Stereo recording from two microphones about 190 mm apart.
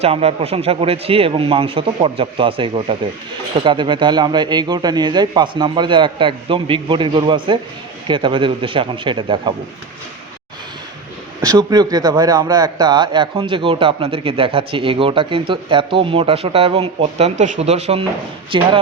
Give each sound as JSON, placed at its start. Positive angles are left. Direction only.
{"t": 0.0, "sound": "a man's voice", "side_deg": -30}
{"t": 11.4, "sound": "a man's voice", "side_deg": -20}